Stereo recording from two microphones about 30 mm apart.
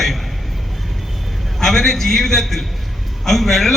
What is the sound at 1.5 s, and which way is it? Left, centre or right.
A man's voice, centre.